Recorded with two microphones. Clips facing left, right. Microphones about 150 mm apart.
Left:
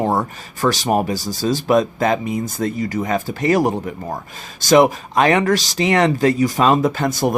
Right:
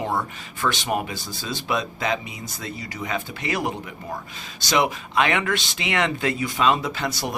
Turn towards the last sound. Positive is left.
turn(degrees=45)  # may be behind; listen again after turning